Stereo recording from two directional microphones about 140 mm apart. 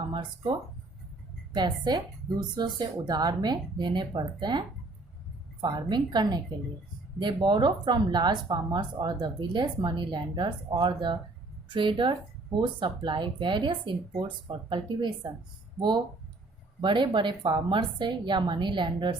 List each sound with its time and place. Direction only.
0.1 s speech: 35° right (ahead or behind)
1.5 s a woman's voice: 30° right (ahead or behind)
16.8 s speech: 35° right (ahead or behind)